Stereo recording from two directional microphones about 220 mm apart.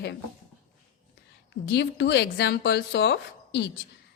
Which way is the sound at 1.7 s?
50° left (ahead or behind).